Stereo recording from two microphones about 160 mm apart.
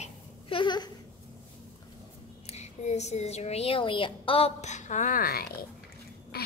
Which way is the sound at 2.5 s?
45° left (ahead or behind).